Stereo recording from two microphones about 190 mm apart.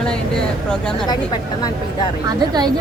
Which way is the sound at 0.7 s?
5° left (ahead or behind).